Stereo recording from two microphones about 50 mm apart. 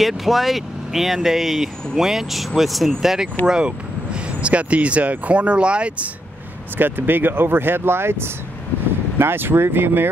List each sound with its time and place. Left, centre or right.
0.0 s speech: centre
3.4 s speech: centre
6.8 s speech: right